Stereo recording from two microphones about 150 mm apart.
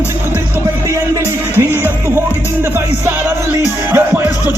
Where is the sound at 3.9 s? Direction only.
10° right (ahead or behind).